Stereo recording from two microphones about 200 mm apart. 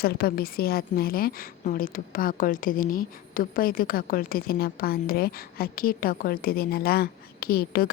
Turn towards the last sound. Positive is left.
turn(degrees=50)  # may be behind; listen again after turning